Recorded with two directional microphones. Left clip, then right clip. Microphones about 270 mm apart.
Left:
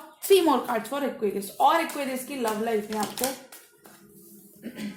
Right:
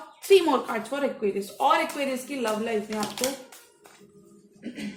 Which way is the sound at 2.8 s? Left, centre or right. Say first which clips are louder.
Even; centre.